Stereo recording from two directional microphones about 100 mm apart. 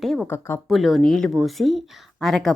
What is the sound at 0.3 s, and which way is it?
Speech, 25° left (ahead or behind).